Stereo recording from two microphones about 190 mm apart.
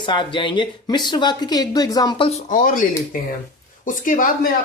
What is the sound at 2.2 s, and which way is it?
Speech, 40° left (ahead or behind).